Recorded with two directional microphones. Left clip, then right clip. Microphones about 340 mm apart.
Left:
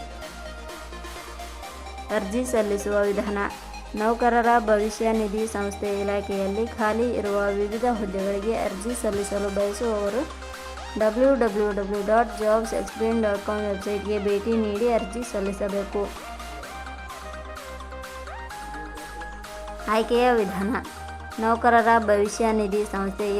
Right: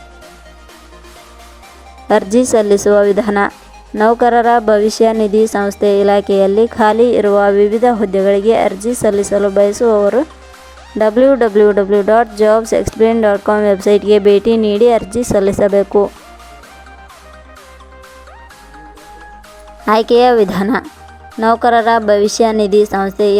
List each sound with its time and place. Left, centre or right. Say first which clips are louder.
2.0 s speech: right 15 dB; right
19.8 s speech: right 12 dB; right